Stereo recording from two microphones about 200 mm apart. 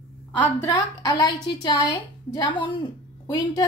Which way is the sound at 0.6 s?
20° left (ahead or behind).